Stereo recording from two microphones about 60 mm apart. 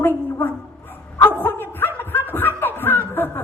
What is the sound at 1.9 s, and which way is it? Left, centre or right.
Snicker, left.